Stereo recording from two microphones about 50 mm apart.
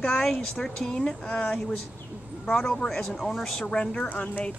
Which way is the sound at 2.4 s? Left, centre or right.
Centre.